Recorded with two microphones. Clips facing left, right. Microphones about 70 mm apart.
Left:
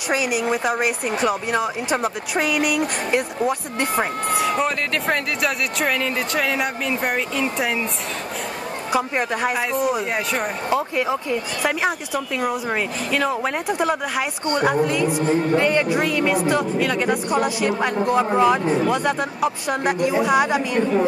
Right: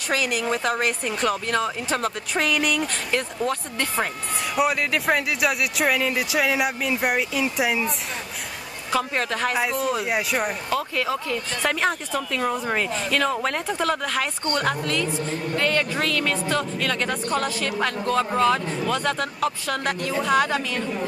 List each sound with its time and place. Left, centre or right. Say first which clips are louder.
0.1 s speech: left 3 dB; centre
4.6 s speech: even; centre
8.9 s speech: left 2 dB; centre
9.6 s speech: left 2 dB; centre
10.7 s speech: left 6 dB; left
11.6 s speech: even; centre